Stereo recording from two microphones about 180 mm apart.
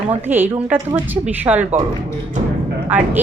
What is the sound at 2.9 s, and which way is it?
Speech, 10° right (ahead or behind).